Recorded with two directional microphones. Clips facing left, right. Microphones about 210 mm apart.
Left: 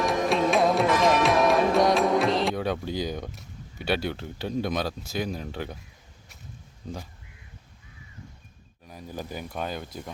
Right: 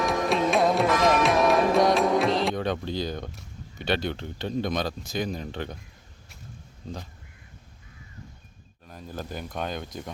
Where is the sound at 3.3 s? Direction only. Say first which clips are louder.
Even; 10° left (ahead or behind).